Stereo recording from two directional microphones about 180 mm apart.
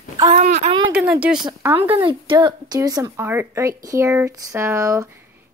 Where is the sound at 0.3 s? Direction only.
35° right (ahead or behind).